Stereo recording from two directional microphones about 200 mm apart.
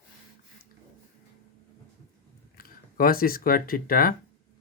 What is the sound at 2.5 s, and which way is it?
Speech, 45° left (ahead or behind).